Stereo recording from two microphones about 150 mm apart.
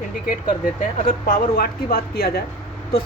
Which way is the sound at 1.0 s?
75° left (ahead or behind).